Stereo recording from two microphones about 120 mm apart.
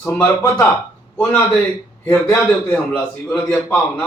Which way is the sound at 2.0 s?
15° left (ahead or behind).